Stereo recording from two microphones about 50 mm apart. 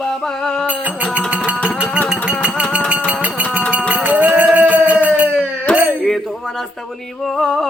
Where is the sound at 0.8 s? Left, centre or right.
Right.